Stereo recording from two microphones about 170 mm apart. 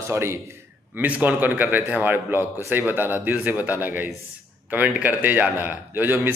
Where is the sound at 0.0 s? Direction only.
15° right (ahead or behind).